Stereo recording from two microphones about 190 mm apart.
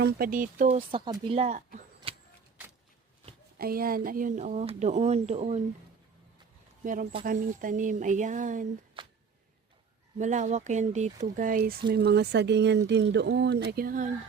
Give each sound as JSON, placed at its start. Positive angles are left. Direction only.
{"t": 0.0, "sound": "speech", "side_deg": -50}
{"t": 0.8, "sound": "speech", "side_deg": -30}
{"t": 1.4, "sound": "speech", "side_deg": -40}
{"t": 2.1, "sound": "vehicle", "side_deg": -30}
{"t": 3.6, "sound": "speech", "side_deg": -50}
{"t": 6.8, "sound": "speech", "side_deg": -45}
{"t": 9.0, "sound": "humming", "side_deg": -25}
{"t": 10.2, "sound": "speech", "side_deg": -40}